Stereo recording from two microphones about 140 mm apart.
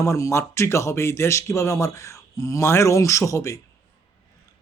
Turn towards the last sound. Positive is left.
turn(degrees=20)  # may be behind; listen again after turning